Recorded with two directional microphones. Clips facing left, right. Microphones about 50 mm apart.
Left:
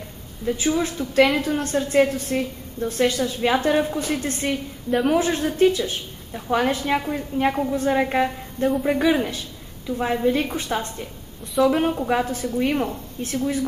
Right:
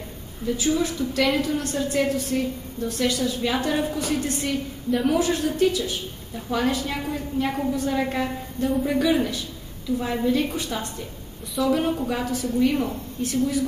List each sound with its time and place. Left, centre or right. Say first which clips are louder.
0.5 s a woman's voice: left 1 dB; left